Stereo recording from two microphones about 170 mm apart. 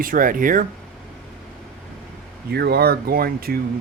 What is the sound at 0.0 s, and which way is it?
Speech, 55° right (ahead or behind).